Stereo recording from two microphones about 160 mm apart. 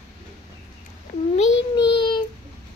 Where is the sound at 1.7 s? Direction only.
30° left (ahead or behind).